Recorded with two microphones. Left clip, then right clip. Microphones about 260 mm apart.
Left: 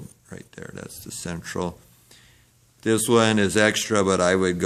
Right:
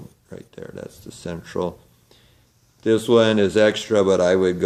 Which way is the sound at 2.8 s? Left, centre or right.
Left.